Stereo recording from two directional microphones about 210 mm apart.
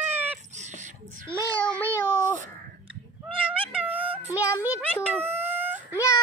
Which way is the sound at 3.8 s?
10° right (ahead or behind).